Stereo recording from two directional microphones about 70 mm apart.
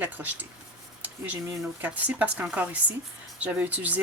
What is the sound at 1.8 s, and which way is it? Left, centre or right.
Speech, right.